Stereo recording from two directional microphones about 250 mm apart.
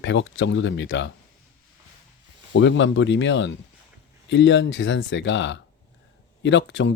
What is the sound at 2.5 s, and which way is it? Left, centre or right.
Speech, left.